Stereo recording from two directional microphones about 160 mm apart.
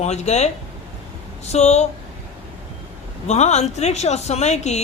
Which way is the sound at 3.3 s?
45° left (ahead or behind).